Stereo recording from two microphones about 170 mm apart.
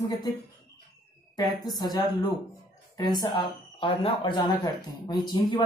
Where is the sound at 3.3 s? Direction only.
30° left (ahead or behind).